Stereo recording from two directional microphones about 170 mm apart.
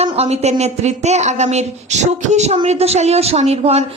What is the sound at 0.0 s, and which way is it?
A woman's voice, 40° right (ahead or behind).